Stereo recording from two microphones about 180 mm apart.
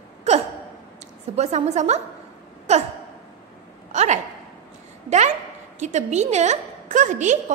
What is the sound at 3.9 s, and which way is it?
Speech, 40° right (ahead or behind).